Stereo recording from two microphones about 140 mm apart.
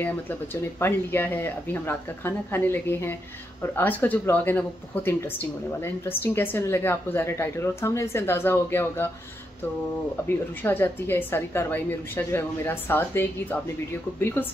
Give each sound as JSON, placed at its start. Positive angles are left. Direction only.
{"t": 0.0, "sound": "speech", "side_deg": 15}
{"t": 10.2, "sound": "speech", "side_deg": 15}